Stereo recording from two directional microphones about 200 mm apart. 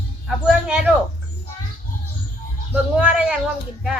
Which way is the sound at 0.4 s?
5° right (ahead or behind).